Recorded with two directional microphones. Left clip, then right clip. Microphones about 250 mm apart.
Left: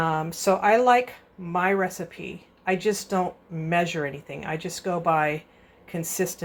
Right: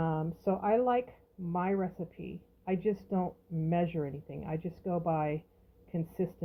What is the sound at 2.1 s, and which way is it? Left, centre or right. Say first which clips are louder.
Speech: left 9 dB; left.